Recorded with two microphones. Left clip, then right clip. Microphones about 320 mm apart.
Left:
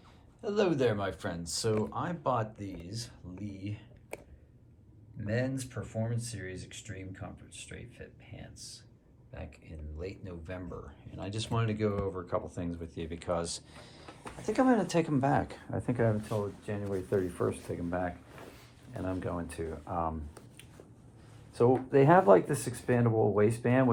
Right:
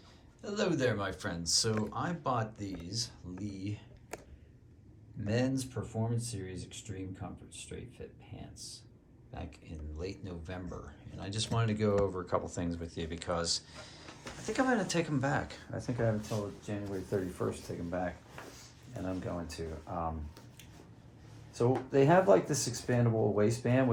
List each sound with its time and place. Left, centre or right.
0.4 s speech: centre
5.2 s speech: centre; by 17.5 s left
19.0 s speech: left
21.5 s speech: centre